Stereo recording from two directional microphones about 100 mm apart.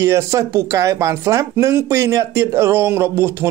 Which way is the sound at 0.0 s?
30° right (ahead or behind).